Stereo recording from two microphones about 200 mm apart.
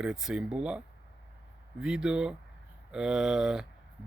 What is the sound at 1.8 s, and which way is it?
Speech, 5° right (ahead or behind).